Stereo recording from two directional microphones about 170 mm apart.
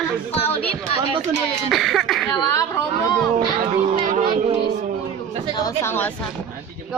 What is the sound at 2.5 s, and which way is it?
Speech, 20° left (ahead or behind).